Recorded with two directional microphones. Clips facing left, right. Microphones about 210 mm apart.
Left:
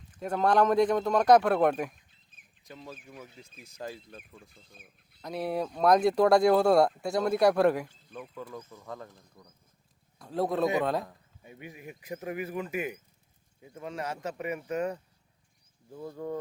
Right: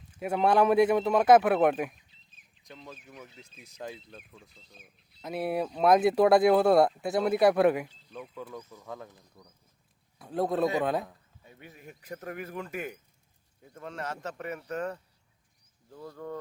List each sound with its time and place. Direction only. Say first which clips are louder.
0.1 s a man's voice: right 1 dB; 10° right (ahead or behind)
4.5 s speech: even; 50° left (ahead or behind)
5.2 s speech: right 1 dB; 5° right (ahead or behind)
11.4 s speech: left 4 dB; 15° left (ahead or behind)